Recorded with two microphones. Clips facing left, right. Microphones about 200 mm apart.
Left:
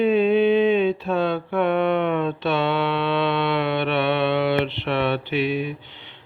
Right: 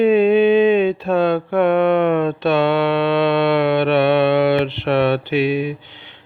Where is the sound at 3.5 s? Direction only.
80° right.